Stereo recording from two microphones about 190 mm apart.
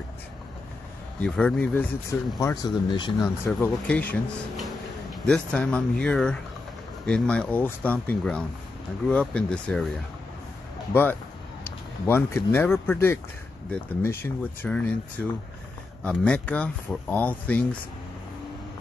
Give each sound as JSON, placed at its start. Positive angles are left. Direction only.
{"t": 1.2, "sound": "speech", "side_deg": 5}
{"t": 2.3, "sound": "speech", "side_deg": 20}
{"t": 3.4, "sound": "speech", "side_deg": 5}